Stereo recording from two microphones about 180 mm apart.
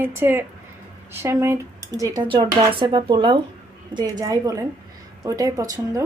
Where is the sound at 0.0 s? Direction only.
10° right (ahead or behind).